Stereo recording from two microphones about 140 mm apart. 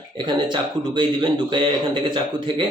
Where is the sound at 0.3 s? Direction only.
35° right (ahead or behind).